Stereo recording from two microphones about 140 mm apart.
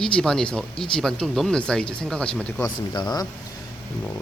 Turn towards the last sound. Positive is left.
turn(degrees=30)  # may be behind; listen again after turning